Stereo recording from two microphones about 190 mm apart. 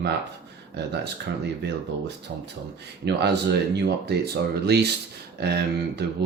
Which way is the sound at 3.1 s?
60° right (ahead or behind).